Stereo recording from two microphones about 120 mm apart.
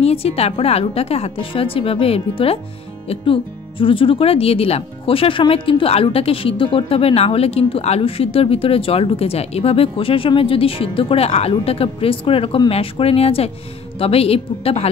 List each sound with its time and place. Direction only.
0.0 s a woman's voice: 55° left (ahead or behind)